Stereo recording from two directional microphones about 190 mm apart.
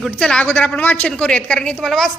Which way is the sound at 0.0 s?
5° left (ahead or behind).